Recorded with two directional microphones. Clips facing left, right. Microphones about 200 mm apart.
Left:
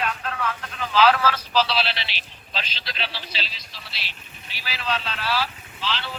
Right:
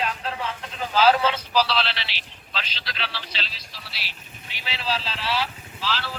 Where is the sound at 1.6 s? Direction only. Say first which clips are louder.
Even; 10° left (ahead or behind).